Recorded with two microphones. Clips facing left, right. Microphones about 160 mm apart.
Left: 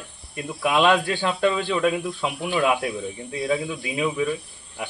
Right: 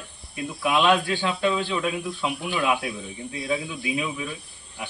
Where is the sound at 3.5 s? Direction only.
55° left (ahead or behind).